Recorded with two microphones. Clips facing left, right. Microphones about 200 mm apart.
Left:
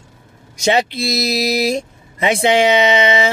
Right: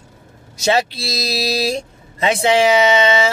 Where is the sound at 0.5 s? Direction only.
15° left (ahead or behind).